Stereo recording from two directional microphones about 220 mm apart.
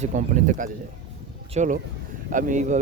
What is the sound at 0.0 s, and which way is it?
Speech, 35° right (ahead or behind).